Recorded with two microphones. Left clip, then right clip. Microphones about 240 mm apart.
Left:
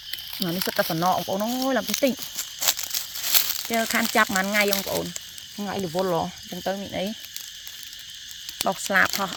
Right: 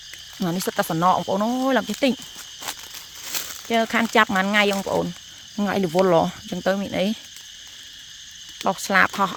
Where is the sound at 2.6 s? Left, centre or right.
Left.